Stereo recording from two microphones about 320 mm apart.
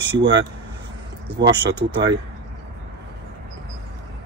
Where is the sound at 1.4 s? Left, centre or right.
Right.